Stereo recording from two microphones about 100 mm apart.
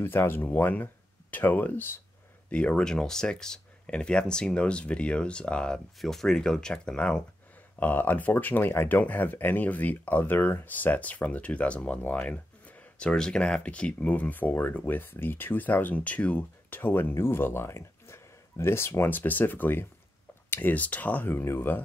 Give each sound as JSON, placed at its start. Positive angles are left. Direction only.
{"t": 0.0, "sound": "speech", "side_deg": 20}